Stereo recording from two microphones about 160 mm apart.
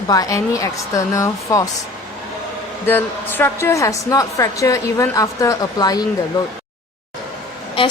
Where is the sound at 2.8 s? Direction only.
15° left (ahead or behind).